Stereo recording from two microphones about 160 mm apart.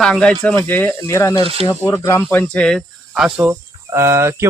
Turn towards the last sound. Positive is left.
turn(degrees=-15)  # may be behind; listen again after turning